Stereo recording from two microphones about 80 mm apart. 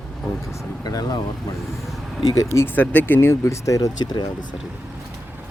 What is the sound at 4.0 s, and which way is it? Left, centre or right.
Speech, left.